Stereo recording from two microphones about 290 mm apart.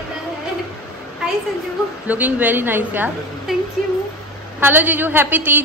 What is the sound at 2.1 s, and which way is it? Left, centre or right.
A woman's voice, centre.